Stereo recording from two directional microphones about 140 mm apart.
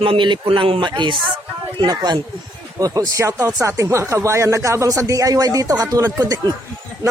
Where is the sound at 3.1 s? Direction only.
20° right (ahead or behind).